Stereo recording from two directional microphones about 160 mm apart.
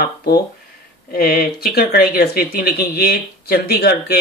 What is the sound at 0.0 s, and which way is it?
Speech, 70° left (ahead or behind).